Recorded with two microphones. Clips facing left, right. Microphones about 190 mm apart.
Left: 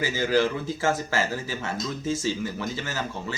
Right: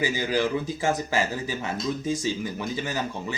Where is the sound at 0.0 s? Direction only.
15° right (ahead or behind).